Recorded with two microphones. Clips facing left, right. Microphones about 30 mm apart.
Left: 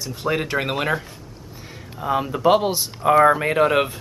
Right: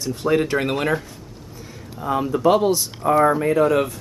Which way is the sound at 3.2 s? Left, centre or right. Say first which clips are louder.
Even; left.